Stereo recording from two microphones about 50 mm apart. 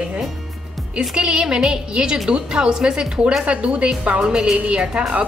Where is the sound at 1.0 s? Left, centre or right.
Centre.